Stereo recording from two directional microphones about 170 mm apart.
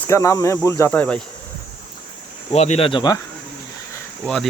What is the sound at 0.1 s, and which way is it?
Cricket, 20° left (ahead or behind).